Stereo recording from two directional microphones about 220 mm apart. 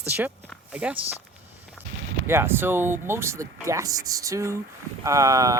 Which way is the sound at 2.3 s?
10° right (ahead or behind).